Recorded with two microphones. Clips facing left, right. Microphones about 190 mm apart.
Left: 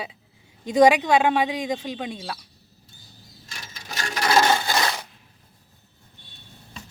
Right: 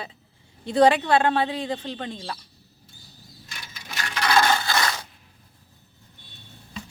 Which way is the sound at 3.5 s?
40° left (ahead or behind).